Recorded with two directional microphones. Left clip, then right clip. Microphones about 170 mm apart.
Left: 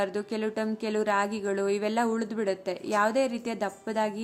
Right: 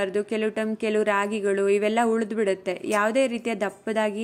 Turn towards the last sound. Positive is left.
turn(degrees=-15)  # may be behind; listen again after turning